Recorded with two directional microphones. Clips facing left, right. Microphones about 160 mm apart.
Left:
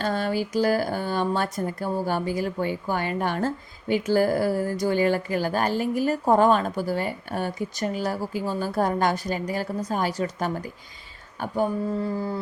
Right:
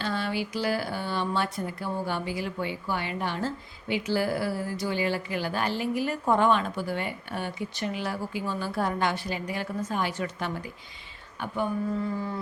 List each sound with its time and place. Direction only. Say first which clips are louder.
0.0 s speech: left 5 dB; 45° left (ahead or behind)